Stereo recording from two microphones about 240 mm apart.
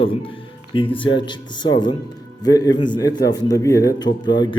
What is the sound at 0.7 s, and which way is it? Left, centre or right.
A man's voice, left.